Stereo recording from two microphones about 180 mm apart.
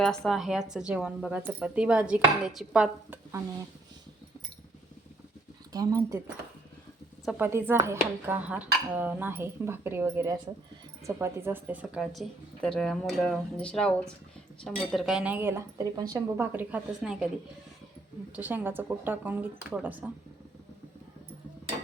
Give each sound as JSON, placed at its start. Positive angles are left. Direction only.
{"t": 0.3, "sound": "speech", "side_deg": 0}
{"t": 5.7, "sound": "speech", "side_deg": -20}
{"t": 7.3, "sound": "speech", "side_deg": -10}
{"t": 18.3, "sound": "speech", "side_deg": -10}